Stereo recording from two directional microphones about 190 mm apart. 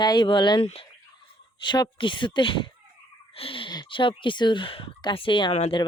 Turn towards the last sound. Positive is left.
turn(degrees=35)  # may be behind; listen again after turning